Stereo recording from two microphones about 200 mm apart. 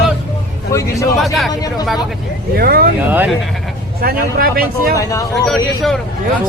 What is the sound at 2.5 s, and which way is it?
Speech, 50° right (ahead or behind).